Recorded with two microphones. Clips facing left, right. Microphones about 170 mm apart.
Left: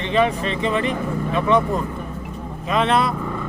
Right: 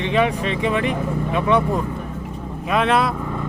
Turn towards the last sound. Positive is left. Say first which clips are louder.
# even
turn(degrees=-5)  # may be behind; listen again after turning